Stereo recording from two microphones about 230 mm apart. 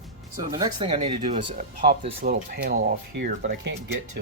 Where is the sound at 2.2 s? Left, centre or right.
Right.